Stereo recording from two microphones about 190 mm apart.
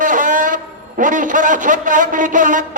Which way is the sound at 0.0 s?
45° right (ahead or behind).